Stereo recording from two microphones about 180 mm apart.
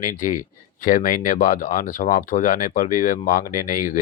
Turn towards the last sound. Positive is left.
turn(degrees=50)  # may be behind; listen again after turning